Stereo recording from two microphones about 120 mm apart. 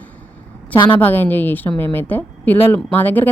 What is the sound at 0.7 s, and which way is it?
Speech, 45° left (ahead or behind).